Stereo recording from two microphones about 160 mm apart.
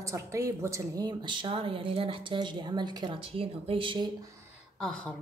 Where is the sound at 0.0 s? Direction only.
20° right (ahead or behind).